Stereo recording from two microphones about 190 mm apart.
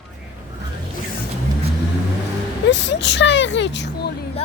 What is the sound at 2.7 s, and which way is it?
Speech, 70° left (ahead or behind).